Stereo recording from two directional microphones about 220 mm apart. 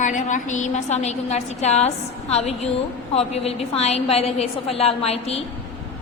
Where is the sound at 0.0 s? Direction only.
35° left (ahead or behind).